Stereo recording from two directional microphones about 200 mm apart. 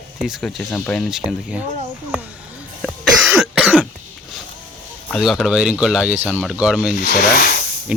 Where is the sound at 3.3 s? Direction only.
5° right (ahead or behind).